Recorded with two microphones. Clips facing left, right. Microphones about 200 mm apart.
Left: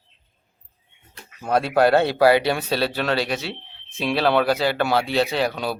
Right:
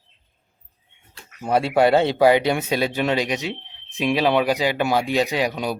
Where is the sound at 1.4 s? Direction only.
10° right (ahead or behind).